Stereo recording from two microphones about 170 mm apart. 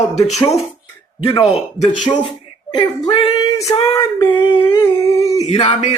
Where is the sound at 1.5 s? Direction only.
40° left (ahead or behind).